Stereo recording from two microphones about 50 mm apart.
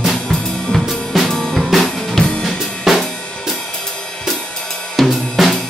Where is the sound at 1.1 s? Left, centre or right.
Centre.